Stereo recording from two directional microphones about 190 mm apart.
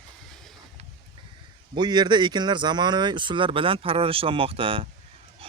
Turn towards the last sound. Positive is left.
turn(degrees=-30)  # may be behind; listen again after turning